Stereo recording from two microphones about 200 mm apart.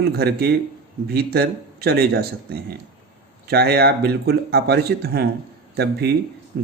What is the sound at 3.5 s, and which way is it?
Speech, 55° right (ahead or behind).